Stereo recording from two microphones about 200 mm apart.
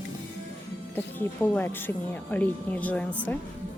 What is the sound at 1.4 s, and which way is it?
Speech, 10° left (ahead or behind).